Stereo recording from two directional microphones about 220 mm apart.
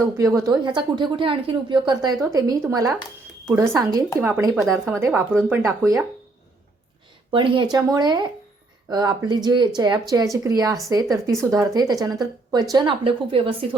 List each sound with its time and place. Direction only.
0.0 s speech: 15° right (ahead or behind)
4.6 s a woman's voice: centre (ahead or behind)
4.9 s speech: 10° right (ahead or behind)
7.3 s speech: 20° right (ahead or behind)